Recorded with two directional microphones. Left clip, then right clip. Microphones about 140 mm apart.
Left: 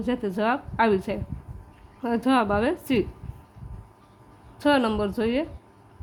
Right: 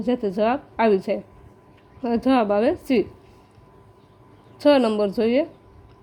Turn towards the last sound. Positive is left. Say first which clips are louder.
# right 5 dB
turn(degrees=-20)  # may be behind; listen again after turning